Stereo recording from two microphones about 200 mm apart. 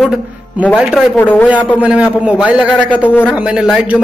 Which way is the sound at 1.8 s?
5° right (ahead or behind).